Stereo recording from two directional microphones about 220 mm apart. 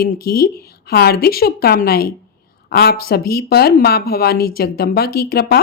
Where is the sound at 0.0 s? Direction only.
45° left (ahead or behind).